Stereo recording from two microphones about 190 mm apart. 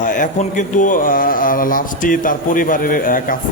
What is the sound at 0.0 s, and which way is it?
Speech, 45° left (ahead or behind).